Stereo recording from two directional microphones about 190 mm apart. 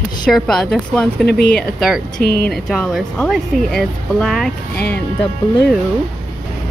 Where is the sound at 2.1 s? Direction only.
50° left (ahead or behind).